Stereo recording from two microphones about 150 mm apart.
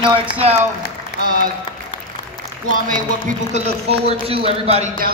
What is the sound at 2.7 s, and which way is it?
Speech, 60° right (ahead or behind).